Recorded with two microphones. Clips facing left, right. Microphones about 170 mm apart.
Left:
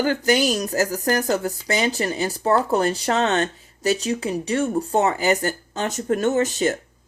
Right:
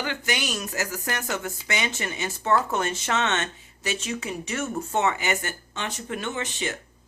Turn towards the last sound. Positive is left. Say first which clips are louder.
# left 11 dB
turn(degrees=40)  # may be behind; listen again after turning